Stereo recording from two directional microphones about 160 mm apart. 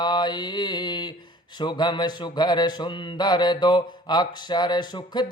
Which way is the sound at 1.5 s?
25° left (ahead or behind).